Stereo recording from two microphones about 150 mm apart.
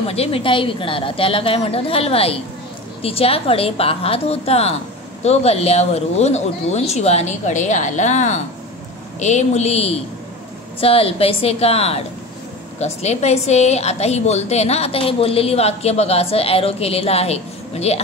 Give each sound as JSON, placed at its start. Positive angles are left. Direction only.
{"t": 0.0, "sound": "a woman's voice", "side_deg": 40}